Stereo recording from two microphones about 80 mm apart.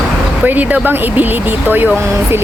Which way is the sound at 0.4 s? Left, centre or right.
Right.